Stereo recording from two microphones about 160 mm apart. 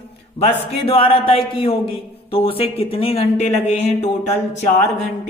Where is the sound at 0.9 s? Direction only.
35° left (ahead or behind).